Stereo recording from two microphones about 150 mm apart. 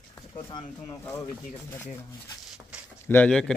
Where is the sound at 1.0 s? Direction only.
15° left (ahead or behind).